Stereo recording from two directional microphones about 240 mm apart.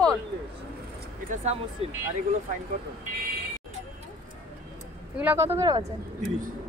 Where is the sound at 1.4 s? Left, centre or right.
Right.